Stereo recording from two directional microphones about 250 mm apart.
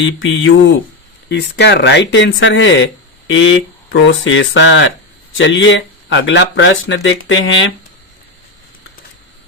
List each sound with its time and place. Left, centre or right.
0.0 s speech: left